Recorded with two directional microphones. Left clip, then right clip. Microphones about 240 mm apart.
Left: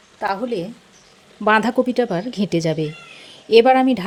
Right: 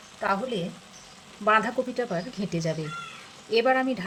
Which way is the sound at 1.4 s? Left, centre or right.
Left.